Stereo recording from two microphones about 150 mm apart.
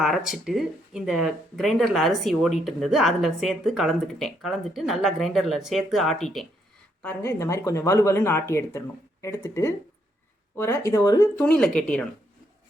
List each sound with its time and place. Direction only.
0.0 s speech: centre (ahead or behind)
7.0 s speech: 15° left (ahead or behind)
11.3 s speech: 5° left (ahead or behind)